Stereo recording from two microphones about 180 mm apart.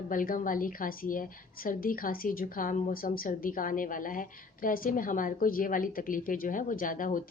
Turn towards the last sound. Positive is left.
turn(degrees=50)  # may be behind; listen again after turning